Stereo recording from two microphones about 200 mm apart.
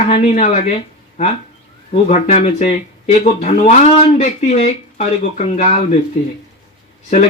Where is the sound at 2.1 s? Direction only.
35° left (ahead or behind).